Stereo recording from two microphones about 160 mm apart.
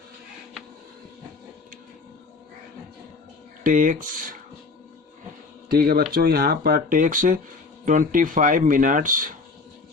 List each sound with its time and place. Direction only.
3.6 s speech: 55° right (ahead or behind)
5.7 s speech: 70° right (ahead or behind)